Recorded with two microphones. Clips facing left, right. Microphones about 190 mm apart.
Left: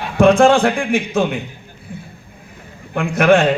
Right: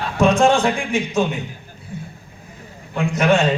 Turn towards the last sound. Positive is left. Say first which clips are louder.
# left 4 dB
turn(degrees=55)  # may be behind; listen again after turning